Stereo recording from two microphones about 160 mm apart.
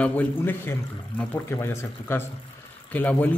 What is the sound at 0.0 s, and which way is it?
Speech, 10° left (ahead or behind).